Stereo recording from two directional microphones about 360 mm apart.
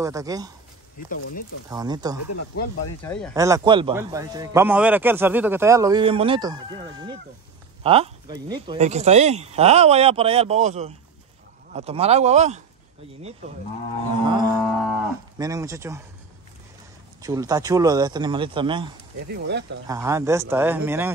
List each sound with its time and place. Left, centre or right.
0.0 s a man's voice: centre
1.0 s speech: left
1.7 s a man's voice: centre
3.0 s speech: centre
3.3 s a man's voice: centre
14.2 s music: centre
14.9 s cattle: centre
17.2 s a man's voice: centre
19.2 s speech: right
19.9 s a man's voice: centre